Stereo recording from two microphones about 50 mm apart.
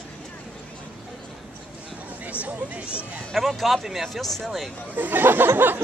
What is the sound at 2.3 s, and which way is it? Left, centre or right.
Speech, right.